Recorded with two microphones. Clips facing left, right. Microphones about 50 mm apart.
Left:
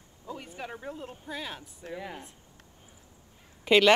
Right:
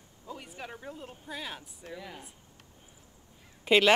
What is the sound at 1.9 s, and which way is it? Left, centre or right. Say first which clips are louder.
Speech: left 4 dB; centre.